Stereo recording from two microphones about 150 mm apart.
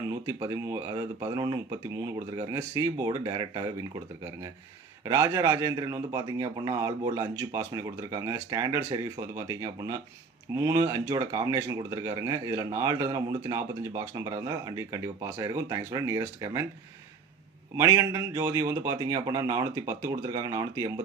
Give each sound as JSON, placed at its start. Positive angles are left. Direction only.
{"t": 0.3, "sound": "speech", "side_deg": -20}
{"t": 2.6, "sound": "speech", "side_deg": -20}
{"t": 5.0, "sound": "speech", "side_deg": -20}
{"t": 17.7, "sound": "speech", "side_deg": -20}